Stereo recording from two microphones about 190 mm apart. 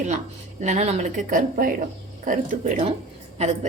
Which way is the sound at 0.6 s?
35° right (ahead or behind).